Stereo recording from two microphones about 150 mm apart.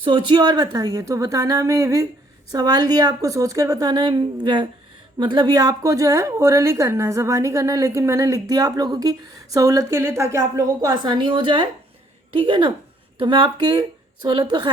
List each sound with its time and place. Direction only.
0.0 s a woman's voice: 35° right (ahead or behind)